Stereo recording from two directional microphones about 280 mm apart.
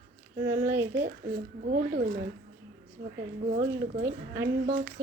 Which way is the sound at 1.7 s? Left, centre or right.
Right.